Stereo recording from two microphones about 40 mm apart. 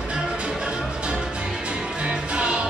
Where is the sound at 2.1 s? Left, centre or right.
Right.